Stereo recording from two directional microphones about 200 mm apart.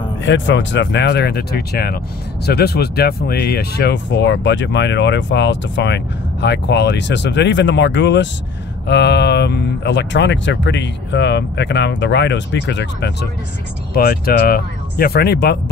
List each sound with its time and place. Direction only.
0.2 s speech: 65° left (ahead or behind)